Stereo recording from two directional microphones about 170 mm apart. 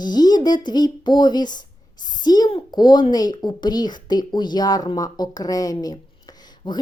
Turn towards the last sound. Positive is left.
turn(degrees=25)  # may be behind; listen again after turning